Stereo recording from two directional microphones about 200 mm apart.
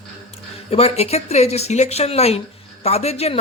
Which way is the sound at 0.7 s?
30° left (ahead or behind).